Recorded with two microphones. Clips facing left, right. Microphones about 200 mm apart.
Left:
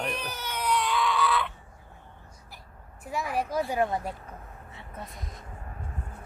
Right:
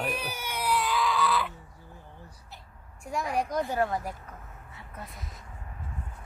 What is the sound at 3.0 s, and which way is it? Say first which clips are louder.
Speech: even; 5° left (ahead or behind).